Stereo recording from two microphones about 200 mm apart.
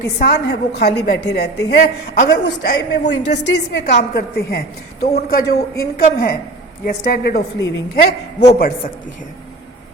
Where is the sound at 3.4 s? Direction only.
60° left (ahead or behind).